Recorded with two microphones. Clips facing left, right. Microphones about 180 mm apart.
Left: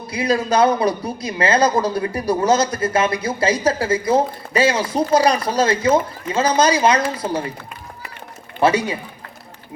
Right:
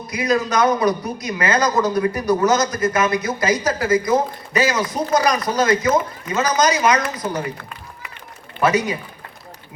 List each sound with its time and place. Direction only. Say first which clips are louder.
0.1 s speech: left 1 dB; 30° left (ahead or behind)
8.6 s speech: left 1 dB; 30° left (ahead or behind)